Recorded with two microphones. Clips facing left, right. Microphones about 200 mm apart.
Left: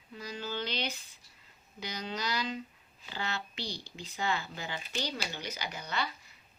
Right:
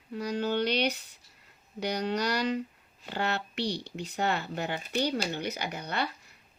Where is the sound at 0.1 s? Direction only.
65° right (ahead or behind).